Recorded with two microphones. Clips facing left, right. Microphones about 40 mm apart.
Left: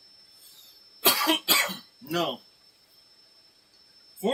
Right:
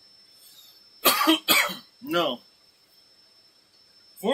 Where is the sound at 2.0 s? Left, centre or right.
Right.